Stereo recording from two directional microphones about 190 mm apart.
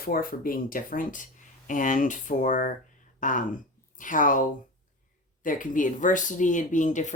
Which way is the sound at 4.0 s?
45° left (ahead or behind).